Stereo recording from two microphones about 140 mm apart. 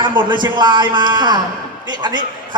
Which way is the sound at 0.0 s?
35° right (ahead or behind).